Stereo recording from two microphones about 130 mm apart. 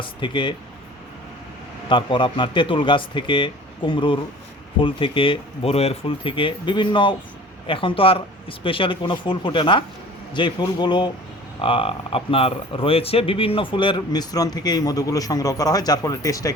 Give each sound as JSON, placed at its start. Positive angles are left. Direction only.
{"t": 0.0, "sound": "speech", "side_deg": 40}
{"t": 1.9, "sound": "speech", "side_deg": 40}